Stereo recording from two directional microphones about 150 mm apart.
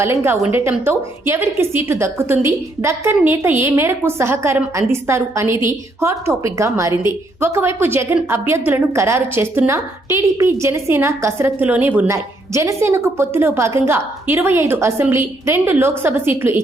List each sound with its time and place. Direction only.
0.0 s a woman's voice: 15° right (ahead or behind)